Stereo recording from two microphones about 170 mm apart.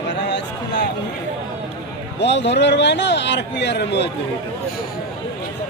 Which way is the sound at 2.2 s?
90° left.